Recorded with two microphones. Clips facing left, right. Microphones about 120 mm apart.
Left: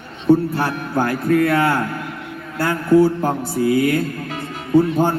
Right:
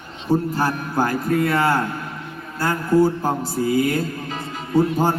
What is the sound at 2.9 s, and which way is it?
A man's voice, 60° left (ahead or behind).